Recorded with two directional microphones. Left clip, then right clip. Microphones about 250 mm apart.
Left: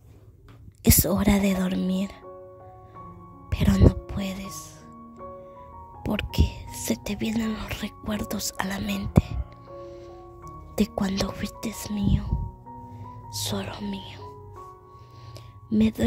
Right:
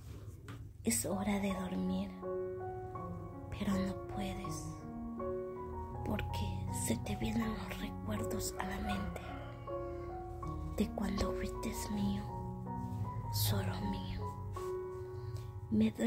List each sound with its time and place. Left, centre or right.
0.8 s a woman's voice: left
3.4 s speech: left
6.0 s speech: left
10.4 s speech: left
13.3 s a woman's voice: left
15.7 s a woman's voice: left